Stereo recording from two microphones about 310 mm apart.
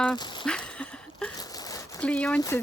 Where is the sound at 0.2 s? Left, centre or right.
Centre.